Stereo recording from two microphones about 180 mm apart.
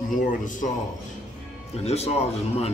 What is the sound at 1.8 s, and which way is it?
Speech, 35° left (ahead or behind).